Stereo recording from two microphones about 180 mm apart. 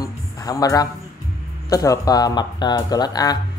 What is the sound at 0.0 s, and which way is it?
Music, 20° left (ahead or behind).